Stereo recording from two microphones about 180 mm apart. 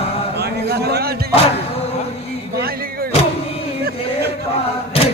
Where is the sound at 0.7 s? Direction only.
65° right (ahead or behind).